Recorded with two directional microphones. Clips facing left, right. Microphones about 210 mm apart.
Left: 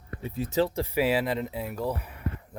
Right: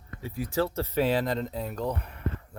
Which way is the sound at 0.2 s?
25° left (ahead or behind).